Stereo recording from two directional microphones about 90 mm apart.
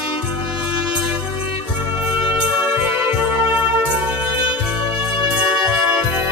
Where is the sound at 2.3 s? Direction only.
20° right (ahead or behind).